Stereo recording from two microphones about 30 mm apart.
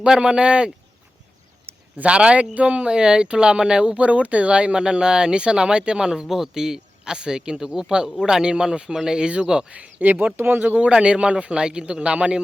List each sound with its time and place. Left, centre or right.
0.0 s speech: right
2.0 s a man's voice: right
2.9 s speech: right
4.0 s speech: right
6.2 s speech: centre
6.5 s speech: centre
9.6 s a man's voice: right
10.0 s speech: right
10.2 s speech: right
11.0 s a man's voice: right